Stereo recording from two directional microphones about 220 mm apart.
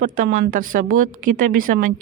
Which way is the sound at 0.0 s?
35° right (ahead or behind).